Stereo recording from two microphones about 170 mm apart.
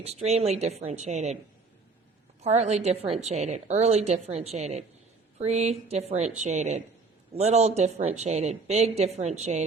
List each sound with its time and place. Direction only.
0.0 s a woman's voice: 40° right (ahead or behind)
2.4 s a woman's voice: 40° right (ahead or behind)